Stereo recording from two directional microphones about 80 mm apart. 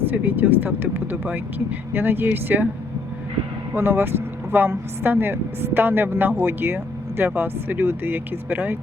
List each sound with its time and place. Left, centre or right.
0.1 s speech: right
3.8 s speech: right